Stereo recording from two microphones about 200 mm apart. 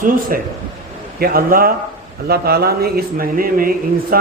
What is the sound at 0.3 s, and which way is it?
A man's voice, 45° right (ahead or behind).